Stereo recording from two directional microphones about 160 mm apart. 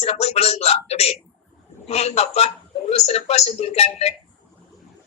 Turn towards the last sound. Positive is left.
turn(degrees=40)  # may be behind; listen again after turning